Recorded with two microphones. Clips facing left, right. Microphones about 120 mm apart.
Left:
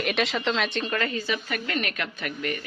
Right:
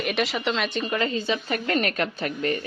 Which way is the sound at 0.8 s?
20° right (ahead or behind).